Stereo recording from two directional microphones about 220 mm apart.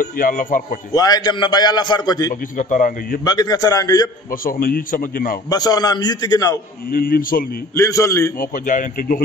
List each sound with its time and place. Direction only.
0.0 s a man's voice: 35° left (ahead or behind)
0.9 s a man's voice: 15° left (ahead or behind)
2.5 s a man's voice: 35° left (ahead or behind)
3.3 s a man's voice: 15° left (ahead or behind)
4.3 s a man's voice: 40° left (ahead or behind)
5.5 s a man's voice: 15° left (ahead or behind)
6.9 s a man's voice: 40° left (ahead or behind)
7.7 s a man's voice: 15° left (ahead or behind)
8.4 s a man's voice: 40° left (ahead or behind)